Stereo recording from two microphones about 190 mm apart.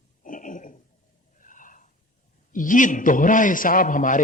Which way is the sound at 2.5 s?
45° left (ahead or behind).